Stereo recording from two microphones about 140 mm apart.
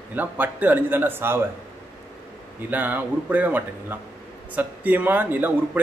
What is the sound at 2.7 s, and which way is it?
A man's voice, 10° right (ahead or behind).